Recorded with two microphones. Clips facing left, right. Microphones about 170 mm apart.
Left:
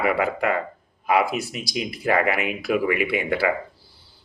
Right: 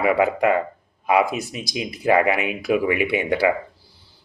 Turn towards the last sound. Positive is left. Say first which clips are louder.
# right 2 dB
turn(degrees=-20)  # may be behind; listen again after turning